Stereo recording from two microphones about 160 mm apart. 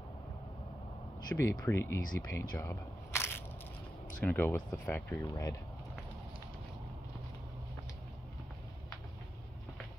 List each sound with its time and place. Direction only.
1.3 s speech: 15° left (ahead or behind)